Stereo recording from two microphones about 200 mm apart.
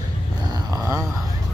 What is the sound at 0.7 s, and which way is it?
Speech, 15° right (ahead or behind).